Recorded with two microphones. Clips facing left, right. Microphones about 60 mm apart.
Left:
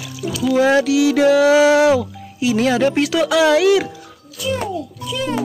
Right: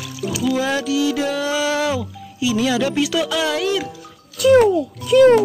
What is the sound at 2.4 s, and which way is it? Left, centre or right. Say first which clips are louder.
Speech: left 3 dB; left.